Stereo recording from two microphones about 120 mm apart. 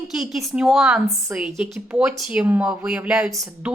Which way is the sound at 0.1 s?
5° right (ahead or behind).